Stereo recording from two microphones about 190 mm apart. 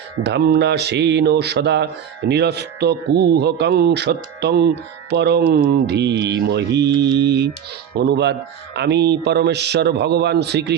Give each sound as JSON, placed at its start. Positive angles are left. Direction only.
{"t": 0.2, "sound": "speech", "side_deg": -60}